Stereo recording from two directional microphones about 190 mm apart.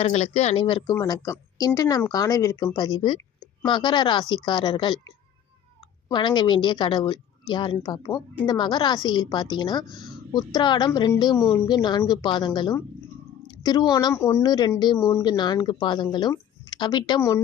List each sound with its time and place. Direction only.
0.0 s speech: 35° left (ahead or behind)
9.8 s speech: centre (ahead or behind)
10.3 s speech: 25° left (ahead or behind)